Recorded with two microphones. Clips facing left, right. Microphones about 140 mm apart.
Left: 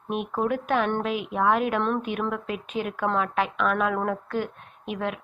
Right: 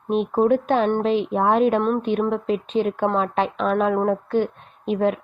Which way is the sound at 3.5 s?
30° right (ahead or behind).